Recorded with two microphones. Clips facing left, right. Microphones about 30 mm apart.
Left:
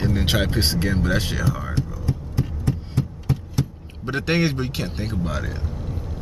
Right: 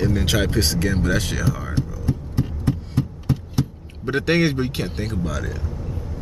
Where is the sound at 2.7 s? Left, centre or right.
Right.